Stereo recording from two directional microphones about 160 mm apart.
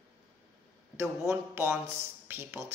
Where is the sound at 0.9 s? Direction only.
15° right (ahead or behind).